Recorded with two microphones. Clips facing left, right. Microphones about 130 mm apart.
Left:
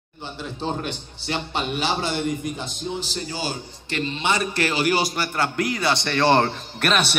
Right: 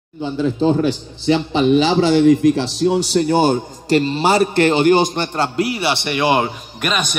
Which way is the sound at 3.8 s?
35° right (ahead or behind).